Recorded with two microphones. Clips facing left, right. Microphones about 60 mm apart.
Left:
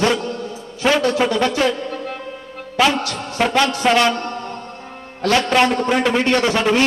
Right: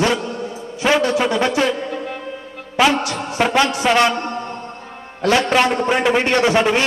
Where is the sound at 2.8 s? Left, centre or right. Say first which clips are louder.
Right 1 dB; centre.